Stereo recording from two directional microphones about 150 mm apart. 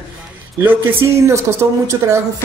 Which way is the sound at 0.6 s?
15° right (ahead or behind).